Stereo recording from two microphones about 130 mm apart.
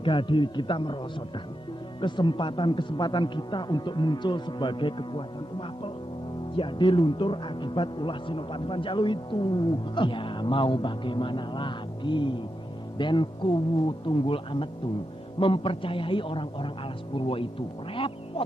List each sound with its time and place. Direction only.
0.0 s speech: 40° left (ahead or behind)
2.0 s speech: 35° left (ahead or behind)
17.9 s music: 45° left (ahead or behind)